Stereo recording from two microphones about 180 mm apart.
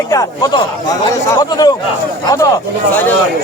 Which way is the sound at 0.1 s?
20° left (ahead or behind).